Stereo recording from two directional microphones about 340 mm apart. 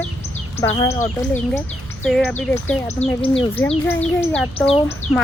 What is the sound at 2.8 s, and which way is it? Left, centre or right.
Speech, centre.